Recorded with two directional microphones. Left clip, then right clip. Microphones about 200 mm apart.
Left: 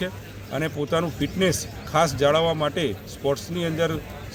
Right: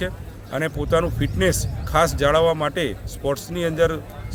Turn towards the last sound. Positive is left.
turn(degrees=-25)  # may be behind; listen again after turning